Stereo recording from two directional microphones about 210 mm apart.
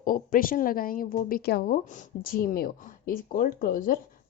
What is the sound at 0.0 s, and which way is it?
A woman's voice, 40° left (ahead or behind).